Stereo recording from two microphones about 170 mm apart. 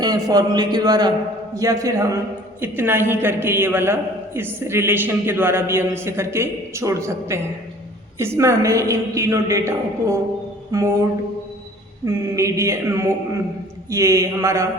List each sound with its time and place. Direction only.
0.0 s a man's voice: 20° right (ahead or behind)
12.0 s a man's voice: 15° right (ahead or behind)